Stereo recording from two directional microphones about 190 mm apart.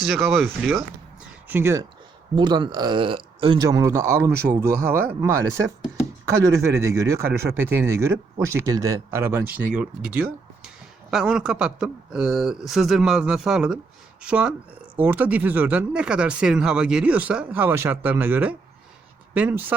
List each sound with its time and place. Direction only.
0.0 s speech: centre (ahead or behind)
1.5 s speech: 10° right (ahead or behind)
2.3 s speech: 25° right (ahead or behind)
3.7 s speech: 15° right (ahead or behind)